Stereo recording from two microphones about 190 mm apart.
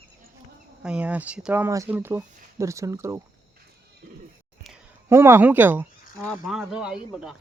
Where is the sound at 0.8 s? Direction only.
5° right (ahead or behind).